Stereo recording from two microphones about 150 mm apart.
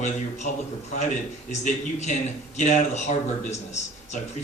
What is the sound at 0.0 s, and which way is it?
A man's voice, 50° left (ahead or behind).